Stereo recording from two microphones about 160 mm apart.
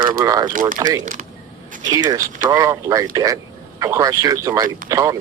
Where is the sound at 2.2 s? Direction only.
55° right (ahead or behind).